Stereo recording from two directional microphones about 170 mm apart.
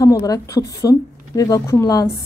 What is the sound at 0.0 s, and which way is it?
A woman's voice, 20° left (ahead or behind).